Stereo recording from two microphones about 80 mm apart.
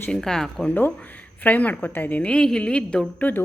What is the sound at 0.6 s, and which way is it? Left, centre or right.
A woman's voice, centre.